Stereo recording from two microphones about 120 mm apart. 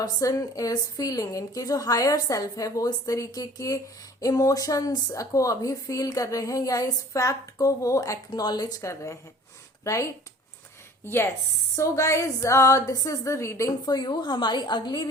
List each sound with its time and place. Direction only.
0.0 s a woman's voice: 30° left (ahead or behind)
8.3 s a woman's voice: 35° left (ahead or behind)